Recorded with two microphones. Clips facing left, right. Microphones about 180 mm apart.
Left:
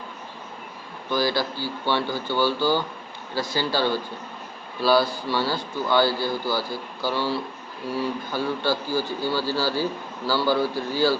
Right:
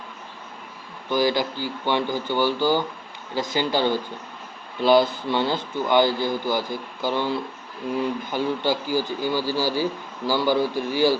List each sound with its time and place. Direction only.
1.1 s speech: 15° right (ahead or behind)